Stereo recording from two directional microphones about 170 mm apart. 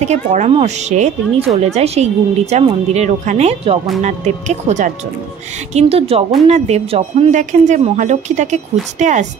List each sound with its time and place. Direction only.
0.0 s speech: 45° right (ahead or behind)